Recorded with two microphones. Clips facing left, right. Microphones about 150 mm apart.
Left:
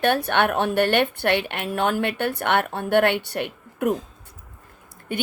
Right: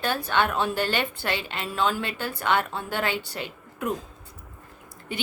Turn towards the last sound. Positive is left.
turn(degrees=55)  # may be behind; listen again after turning